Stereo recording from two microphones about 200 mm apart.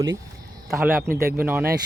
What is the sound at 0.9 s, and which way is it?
Speech, 45° right (ahead or behind).